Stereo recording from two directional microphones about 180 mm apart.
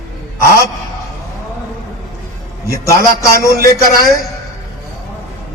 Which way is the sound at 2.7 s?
15° left (ahead or behind).